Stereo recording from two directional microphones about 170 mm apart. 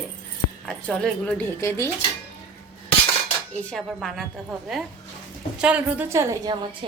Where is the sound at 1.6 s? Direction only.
15° left (ahead or behind).